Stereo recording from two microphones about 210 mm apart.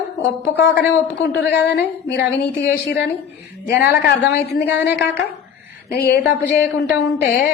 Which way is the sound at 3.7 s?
50° left (ahead or behind).